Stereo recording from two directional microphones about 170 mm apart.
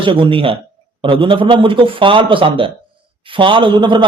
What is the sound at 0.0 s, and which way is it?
A man's voice, 30° right (ahead or behind).